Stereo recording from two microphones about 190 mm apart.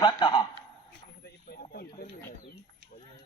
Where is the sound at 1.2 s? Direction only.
55° left (ahead or behind).